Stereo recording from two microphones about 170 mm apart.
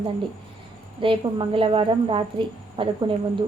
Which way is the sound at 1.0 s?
30° right (ahead or behind).